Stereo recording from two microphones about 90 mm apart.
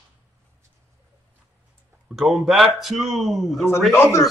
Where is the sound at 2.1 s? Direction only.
5° right (ahead or behind).